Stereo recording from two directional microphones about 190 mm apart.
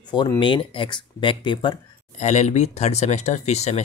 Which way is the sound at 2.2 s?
40° left (ahead or behind).